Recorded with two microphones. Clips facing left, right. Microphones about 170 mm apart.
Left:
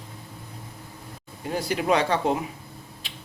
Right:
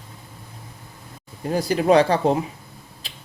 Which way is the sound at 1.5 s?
40° right (ahead or behind).